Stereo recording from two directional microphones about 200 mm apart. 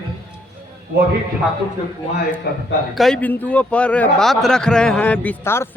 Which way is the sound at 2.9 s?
Centre (ahead or behind).